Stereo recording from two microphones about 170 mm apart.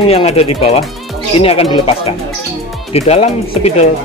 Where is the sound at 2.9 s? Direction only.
40° left (ahead or behind).